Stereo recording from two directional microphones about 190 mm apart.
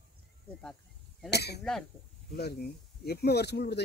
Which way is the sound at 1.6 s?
Centre (ahead or behind).